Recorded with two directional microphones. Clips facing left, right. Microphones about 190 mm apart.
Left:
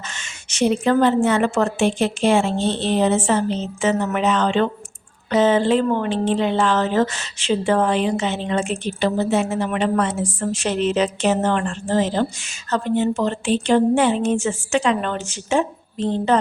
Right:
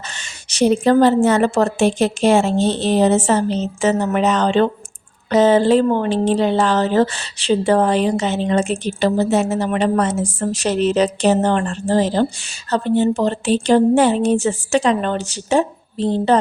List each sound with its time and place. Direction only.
0.1 s a woman's voice: 35° right (ahead or behind)